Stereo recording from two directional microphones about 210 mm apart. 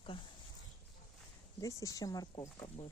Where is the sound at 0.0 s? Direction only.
25° left (ahead or behind).